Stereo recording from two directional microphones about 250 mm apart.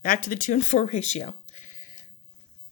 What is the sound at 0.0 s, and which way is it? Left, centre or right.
Speech, left.